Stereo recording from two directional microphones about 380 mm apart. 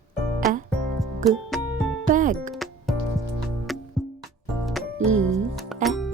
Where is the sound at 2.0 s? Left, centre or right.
Right.